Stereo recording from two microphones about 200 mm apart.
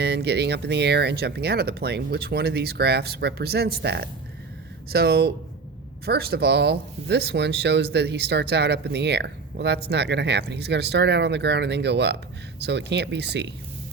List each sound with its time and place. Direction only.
0.0 s speech: 55° right (ahead or behind)